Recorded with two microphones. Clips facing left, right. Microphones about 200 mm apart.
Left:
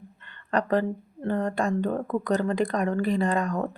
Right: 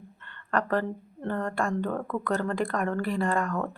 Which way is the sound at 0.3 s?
15° left (ahead or behind).